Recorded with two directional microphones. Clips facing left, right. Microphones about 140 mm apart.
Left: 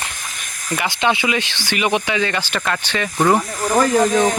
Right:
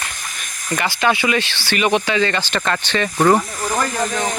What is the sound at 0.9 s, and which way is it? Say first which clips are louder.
Speech: right 1 dB; 20° left (ahead or behind).